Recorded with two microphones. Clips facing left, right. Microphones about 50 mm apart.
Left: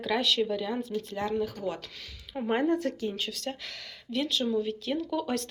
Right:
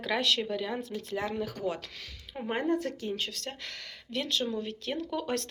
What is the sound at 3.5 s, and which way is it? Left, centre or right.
Speech, centre.